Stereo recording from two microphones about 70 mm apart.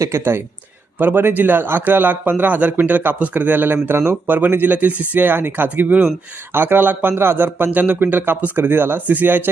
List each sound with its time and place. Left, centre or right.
0.0 s a man's voice: right